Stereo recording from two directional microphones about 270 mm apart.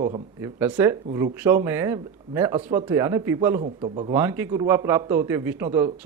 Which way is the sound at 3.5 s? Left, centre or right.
Right.